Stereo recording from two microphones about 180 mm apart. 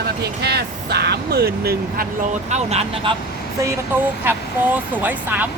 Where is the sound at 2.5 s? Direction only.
35° right (ahead or behind).